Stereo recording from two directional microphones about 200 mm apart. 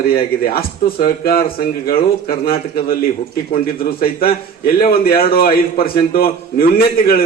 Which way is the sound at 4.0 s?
50° left (ahead or behind).